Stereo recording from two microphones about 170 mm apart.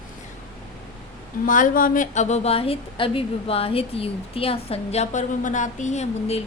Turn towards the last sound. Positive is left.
turn(degrees=40)  # may be behind; listen again after turning